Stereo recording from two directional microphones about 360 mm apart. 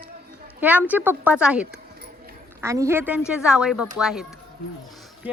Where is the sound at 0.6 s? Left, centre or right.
Centre.